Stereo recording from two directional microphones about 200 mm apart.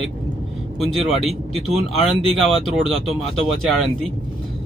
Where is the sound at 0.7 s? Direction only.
Centre (ahead or behind).